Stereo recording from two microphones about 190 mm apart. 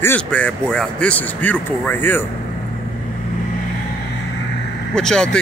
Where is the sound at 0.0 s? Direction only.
10° left (ahead or behind).